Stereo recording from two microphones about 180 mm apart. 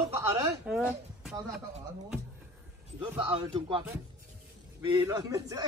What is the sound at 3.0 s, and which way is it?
Speech, 30° right (ahead or behind).